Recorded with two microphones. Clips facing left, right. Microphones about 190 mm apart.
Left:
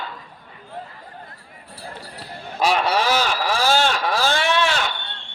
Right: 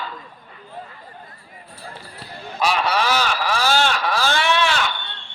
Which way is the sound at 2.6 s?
45° left (ahead or behind).